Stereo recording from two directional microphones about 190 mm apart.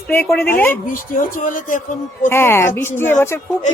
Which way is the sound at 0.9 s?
45° left (ahead or behind).